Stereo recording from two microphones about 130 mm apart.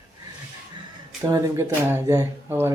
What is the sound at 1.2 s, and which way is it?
Speech, 20° right (ahead or behind).